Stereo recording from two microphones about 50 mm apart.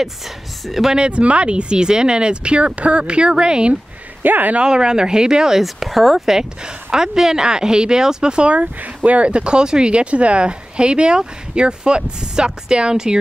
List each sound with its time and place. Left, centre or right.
0.7 s speech: centre
0.9 s speech: right
4.2 s speech: right
4.6 s speech: centre
5.6 s speech: centre
8.5 s speech: right